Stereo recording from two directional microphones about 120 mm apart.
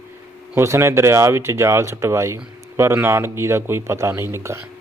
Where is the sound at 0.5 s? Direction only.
25° right (ahead or behind).